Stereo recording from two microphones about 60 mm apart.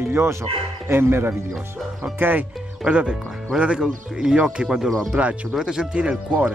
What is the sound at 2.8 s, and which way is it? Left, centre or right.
Speech, centre.